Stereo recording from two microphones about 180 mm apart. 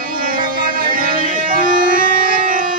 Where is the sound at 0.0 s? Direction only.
50° right (ahead or behind).